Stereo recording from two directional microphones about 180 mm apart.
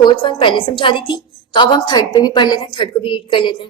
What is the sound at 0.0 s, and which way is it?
A woman's voice, 25° left (ahead or behind).